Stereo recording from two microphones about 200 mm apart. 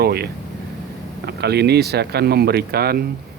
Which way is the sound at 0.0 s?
50° right (ahead or behind).